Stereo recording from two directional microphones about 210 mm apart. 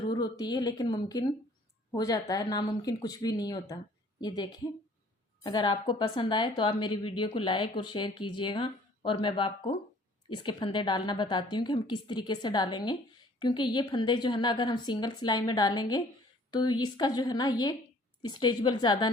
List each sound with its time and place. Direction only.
0.0 s speech: 20° left (ahead or behind)